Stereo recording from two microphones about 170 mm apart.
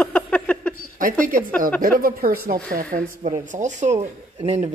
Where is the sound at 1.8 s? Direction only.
60° right (ahead or behind).